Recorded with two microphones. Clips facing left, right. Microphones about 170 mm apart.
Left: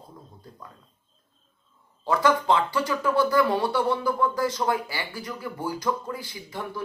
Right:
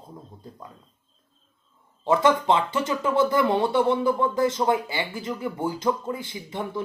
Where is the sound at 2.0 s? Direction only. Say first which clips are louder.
Right 2 dB; 25° right (ahead or behind).